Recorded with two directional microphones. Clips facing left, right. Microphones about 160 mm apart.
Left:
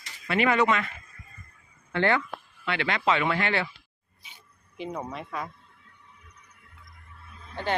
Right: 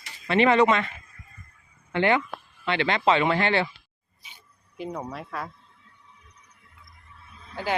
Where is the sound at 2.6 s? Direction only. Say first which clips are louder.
Right 4 dB; 30° right (ahead or behind).